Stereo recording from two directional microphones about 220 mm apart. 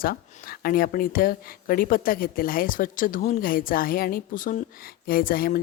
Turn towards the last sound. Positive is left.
turn(degrees=40)  # may be behind; listen again after turning